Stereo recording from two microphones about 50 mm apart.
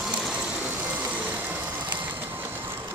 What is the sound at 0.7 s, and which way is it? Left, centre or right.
Vehicle, right.